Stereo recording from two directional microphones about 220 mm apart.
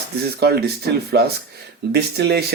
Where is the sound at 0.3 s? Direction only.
45° right (ahead or behind).